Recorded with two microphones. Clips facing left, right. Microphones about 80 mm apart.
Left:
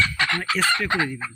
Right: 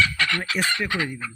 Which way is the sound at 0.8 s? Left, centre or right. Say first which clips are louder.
Left 3 dB; left.